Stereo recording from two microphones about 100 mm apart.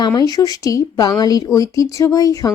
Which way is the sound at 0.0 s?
40° left (ahead or behind).